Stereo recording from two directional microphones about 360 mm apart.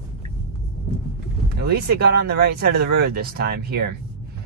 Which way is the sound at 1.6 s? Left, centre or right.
Right.